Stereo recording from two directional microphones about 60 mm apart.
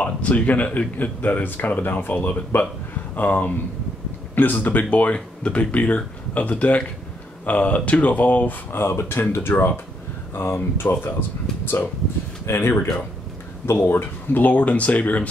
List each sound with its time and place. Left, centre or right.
0.0 s speech: left
8.7 s speech: left
12.4 s speech: left